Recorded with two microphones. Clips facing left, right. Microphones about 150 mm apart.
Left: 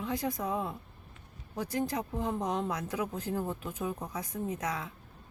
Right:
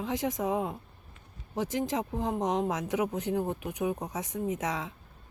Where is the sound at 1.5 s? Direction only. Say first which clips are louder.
Right 3 dB; 90° right.